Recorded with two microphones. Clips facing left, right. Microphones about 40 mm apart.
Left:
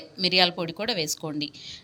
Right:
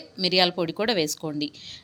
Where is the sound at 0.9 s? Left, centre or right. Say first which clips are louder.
Right 5 dB; right.